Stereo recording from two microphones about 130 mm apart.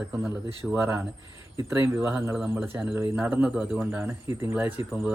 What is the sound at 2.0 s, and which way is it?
Speech, 15° right (ahead or behind).